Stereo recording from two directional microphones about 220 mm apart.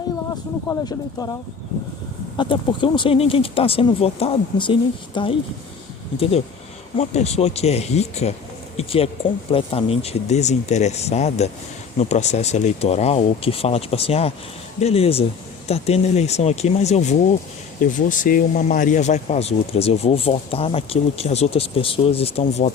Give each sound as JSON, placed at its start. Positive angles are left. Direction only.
{"t": 0.7, "sound": "speech", "side_deg": 15}